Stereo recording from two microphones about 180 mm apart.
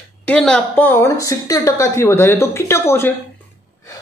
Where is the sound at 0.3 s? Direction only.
5° left (ahead or behind).